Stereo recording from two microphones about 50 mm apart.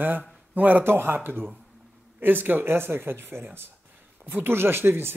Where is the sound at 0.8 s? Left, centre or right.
Right.